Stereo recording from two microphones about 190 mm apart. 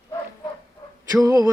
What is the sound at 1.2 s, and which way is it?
Music, 20° right (ahead or behind).